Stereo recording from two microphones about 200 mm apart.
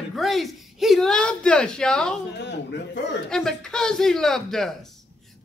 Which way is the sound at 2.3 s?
60° left (ahead or behind).